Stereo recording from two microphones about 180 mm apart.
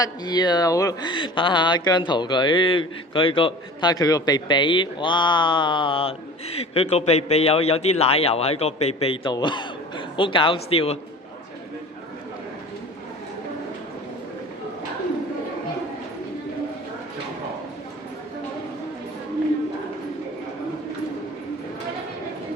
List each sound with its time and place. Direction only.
0.0 s speech: 20° left (ahead or behind)